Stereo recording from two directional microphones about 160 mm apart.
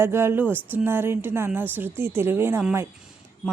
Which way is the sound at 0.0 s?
15° right (ahead or behind).